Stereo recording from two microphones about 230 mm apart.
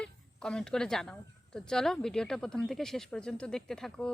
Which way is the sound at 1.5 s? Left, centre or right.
Centre.